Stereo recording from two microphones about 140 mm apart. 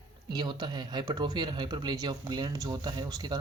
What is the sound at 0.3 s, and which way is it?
Speech, 30° right (ahead or behind).